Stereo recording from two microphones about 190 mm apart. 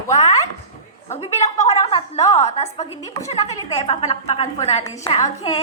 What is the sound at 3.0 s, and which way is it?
Speech, 20° left (ahead or behind).